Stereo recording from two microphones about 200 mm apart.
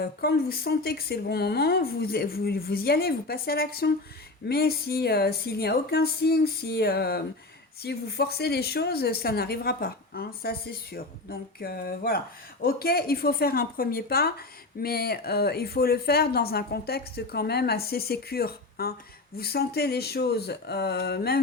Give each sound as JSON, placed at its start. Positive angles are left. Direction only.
{"t": 0.0, "sound": "speech", "side_deg": 50}